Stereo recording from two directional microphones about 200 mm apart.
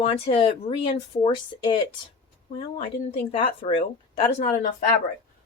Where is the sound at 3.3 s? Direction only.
30° left (ahead or behind).